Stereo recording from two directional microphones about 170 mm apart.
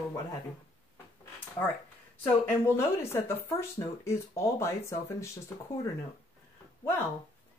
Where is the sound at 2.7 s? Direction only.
15° left (ahead or behind).